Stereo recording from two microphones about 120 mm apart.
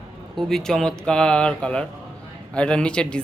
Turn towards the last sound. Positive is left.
turn(degrees=10)  # may be behind; listen again after turning